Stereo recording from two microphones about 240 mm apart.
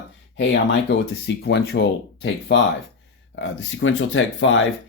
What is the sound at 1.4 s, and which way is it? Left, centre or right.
Speech, left.